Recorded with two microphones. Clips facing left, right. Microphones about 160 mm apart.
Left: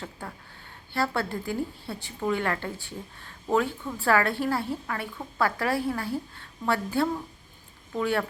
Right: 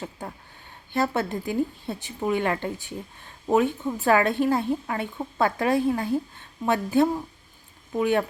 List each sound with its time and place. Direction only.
0.0 s a woman's voice: 20° right (ahead or behind)